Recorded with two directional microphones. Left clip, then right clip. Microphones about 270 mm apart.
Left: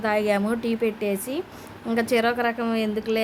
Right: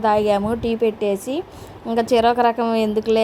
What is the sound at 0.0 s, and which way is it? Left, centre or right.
A woman's voice, centre.